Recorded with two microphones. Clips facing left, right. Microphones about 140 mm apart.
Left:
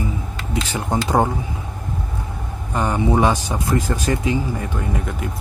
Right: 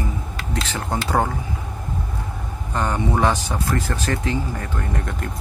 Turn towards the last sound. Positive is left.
turn(degrees=10)  # may be behind; listen again after turning